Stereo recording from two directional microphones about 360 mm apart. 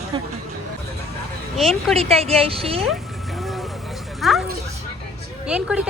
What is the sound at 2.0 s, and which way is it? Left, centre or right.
Speech, centre.